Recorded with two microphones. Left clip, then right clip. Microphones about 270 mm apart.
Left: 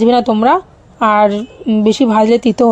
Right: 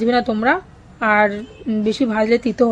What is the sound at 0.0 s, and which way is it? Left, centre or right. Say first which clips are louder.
A woman's voice: left 6 dB; centre.